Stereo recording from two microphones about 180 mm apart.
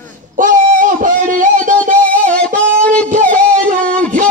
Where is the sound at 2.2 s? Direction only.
10° left (ahead or behind).